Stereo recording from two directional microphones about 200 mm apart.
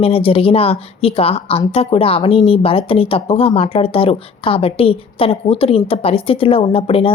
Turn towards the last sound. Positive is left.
turn(degrees=30)  # may be behind; listen again after turning